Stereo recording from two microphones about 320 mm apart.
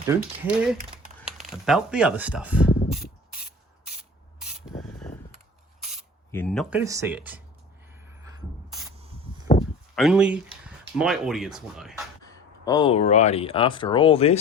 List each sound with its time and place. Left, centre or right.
0.1 s speech: centre
4.8 s a sound: centre
5.9 s mechanisms: centre
9.9 s speech: centre
12.2 s speech: centre